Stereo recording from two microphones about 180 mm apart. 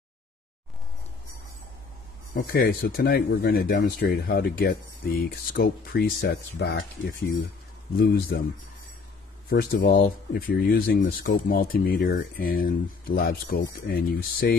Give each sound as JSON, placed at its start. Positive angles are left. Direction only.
{"t": 2.3, "sound": "speech", "side_deg": 55}
{"t": 9.5, "sound": "speech", "side_deg": 55}